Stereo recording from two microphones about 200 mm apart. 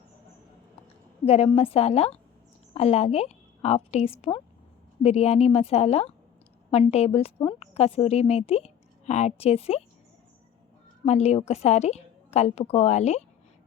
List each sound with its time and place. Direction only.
1.2 s a woman's voice: 30° left (ahead or behind)
11.0 s a woman's voice: 35° left (ahead or behind)